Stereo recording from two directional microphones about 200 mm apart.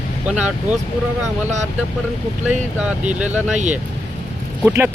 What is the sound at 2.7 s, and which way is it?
Speech, 5° right (ahead or behind).